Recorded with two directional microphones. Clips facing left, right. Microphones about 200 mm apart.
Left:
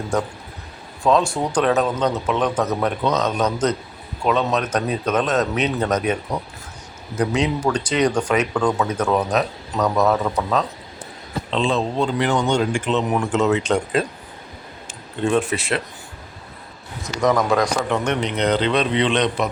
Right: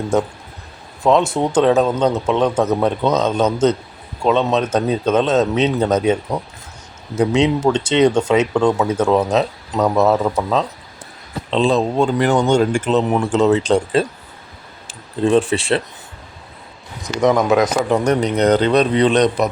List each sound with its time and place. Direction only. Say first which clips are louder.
1.0 s speech: right 3 dB; 20° right (ahead or behind)
7.2 s speech: right 5 dB; 25° right (ahead or behind)
11.5 s speech: right 5 dB; 40° right (ahead or behind)
17.0 s speech: right 4 dB; 20° right (ahead or behind)
17.8 s speech: right 5 dB; 35° right (ahead or behind)